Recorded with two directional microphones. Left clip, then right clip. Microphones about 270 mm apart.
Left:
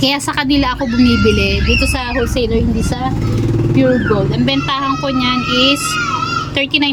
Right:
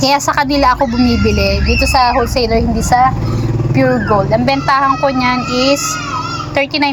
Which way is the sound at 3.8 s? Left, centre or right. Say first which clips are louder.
Right 2 dB; centre.